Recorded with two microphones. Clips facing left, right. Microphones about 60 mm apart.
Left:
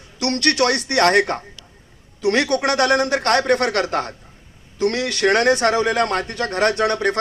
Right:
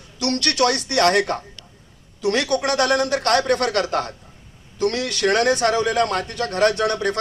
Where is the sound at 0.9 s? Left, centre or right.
Left.